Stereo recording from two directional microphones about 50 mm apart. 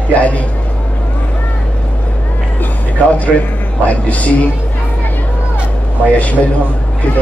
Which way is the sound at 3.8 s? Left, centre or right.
Left.